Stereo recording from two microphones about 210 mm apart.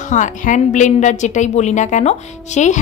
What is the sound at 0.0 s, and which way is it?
A woman's voice, 35° left (ahead or behind).